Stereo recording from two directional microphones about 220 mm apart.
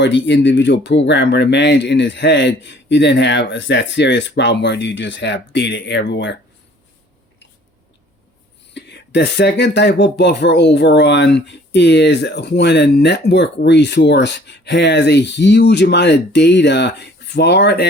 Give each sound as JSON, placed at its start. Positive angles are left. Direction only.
{"t": 0.0, "sound": "speech", "side_deg": 55}
{"t": 8.7, "sound": "speech", "side_deg": 50}